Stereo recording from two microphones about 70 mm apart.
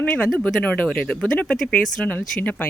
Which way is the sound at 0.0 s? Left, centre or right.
Left.